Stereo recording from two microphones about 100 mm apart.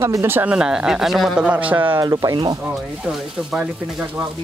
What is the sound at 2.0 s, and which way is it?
Speech, 35° right (ahead or behind).